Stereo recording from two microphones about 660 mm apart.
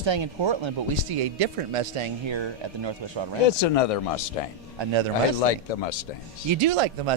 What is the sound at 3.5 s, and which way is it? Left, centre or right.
Speech, left.